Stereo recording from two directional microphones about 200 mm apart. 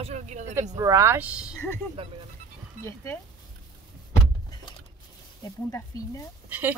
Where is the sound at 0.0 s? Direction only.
35° right (ahead or behind).